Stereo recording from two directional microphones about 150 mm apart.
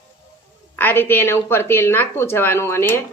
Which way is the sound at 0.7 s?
15° left (ahead or behind).